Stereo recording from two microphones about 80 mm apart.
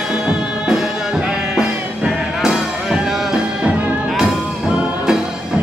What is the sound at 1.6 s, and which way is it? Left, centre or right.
Music, centre.